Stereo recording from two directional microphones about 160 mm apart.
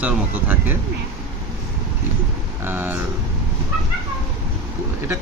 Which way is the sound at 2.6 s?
15° right (ahead or behind).